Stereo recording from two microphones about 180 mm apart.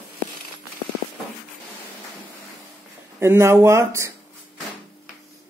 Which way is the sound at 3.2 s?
15° right (ahead or behind).